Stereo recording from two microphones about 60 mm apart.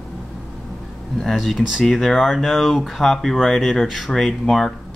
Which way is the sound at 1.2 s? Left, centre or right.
Centre.